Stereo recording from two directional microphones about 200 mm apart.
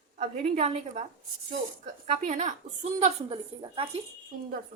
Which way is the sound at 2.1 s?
35° right (ahead or behind).